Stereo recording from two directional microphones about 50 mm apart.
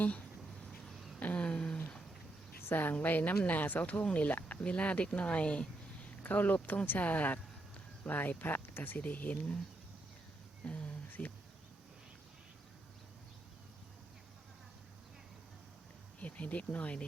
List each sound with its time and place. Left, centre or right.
0.9 s a sound: centre
1.2 s a sound: left
2.6 s a woman's voice: left
6.2 s speech: left
10.7 s speech: left
16.2 s speech: left